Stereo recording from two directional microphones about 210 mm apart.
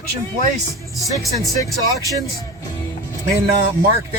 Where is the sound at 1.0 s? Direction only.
Centre (ahead or behind).